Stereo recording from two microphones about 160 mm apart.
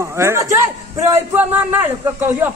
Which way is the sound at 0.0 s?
15° right (ahead or behind).